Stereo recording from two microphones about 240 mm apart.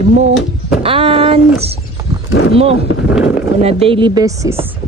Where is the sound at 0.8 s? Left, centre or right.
Right.